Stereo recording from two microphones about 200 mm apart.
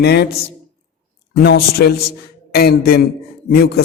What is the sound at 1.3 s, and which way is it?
Speech, 55° left (ahead or behind).